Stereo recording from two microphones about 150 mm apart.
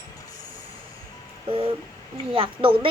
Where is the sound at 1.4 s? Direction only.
35° right (ahead or behind).